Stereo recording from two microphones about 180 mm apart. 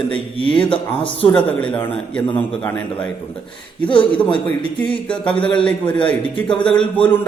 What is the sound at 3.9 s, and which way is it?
Speech, 30° left (ahead or behind).